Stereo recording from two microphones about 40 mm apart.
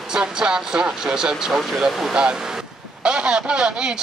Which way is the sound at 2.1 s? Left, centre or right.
Centre.